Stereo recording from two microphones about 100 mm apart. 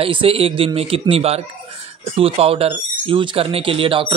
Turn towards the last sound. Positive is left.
turn(degrees=-60)  # may be behind; listen again after turning